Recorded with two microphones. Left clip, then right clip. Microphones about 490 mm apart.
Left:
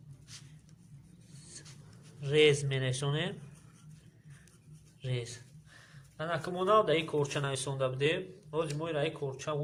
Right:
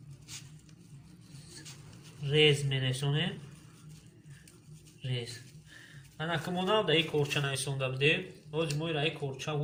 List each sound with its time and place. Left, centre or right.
2.2 s speech: left
6.1 s speech: left